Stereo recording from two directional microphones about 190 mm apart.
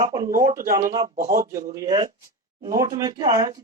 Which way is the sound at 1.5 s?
40° right (ahead or behind).